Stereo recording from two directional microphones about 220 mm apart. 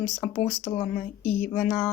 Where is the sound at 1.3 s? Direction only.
35° left (ahead or behind).